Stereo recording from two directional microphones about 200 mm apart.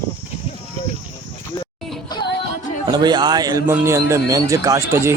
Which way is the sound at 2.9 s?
20° right (ahead or behind).